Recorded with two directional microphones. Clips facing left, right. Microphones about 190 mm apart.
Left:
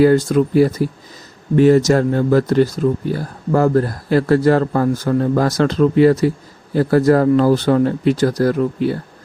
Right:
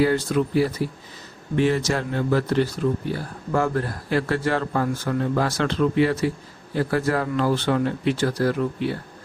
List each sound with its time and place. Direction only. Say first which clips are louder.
0.0 s speech: left 8 dB; 45° left (ahead or behind)